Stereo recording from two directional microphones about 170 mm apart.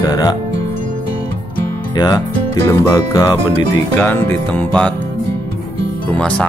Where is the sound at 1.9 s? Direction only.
25° left (ahead or behind).